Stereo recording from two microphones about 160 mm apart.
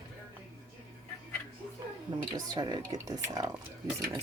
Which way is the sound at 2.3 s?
25° right (ahead or behind).